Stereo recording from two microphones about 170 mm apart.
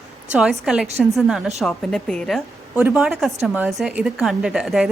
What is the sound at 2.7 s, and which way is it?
A woman's voice, 10° right (ahead or behind).